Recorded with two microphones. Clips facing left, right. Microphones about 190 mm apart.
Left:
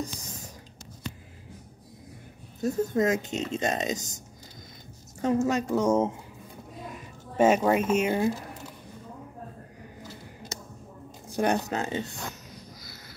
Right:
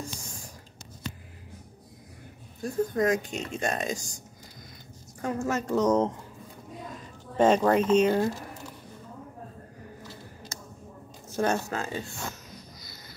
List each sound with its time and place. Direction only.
0.0 s a sound: 20° left (ahead or behind)
2.6 s speech: 25° left (ahead or behind)
5.2 s speech: 20° left (ahead or behind)
5.7 s speech: 10° left (ahead or behind)
7.3 s speech: 10° left (ahead or behind)
11.2 s speech: 15° left (ahead or behind)